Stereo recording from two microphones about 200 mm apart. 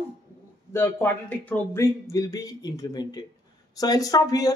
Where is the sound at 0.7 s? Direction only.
10° left (ahead or behind).